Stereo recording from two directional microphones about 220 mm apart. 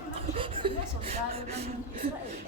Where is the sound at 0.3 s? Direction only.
25° right (ahead or behind).